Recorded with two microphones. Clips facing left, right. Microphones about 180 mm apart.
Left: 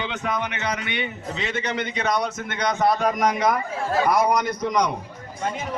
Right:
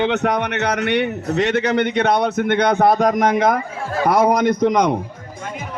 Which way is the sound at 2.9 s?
45° right (ahead or behind).